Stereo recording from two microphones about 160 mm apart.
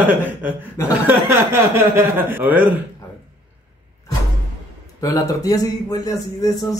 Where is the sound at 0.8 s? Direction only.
15° left (ahead or behind).